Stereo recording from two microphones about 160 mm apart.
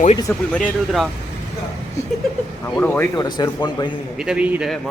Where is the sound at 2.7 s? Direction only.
10° left (ahead or behind).